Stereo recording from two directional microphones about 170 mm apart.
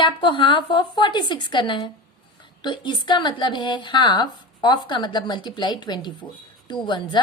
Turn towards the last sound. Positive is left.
turn(degrees=25)  # may be behind; listen again after turning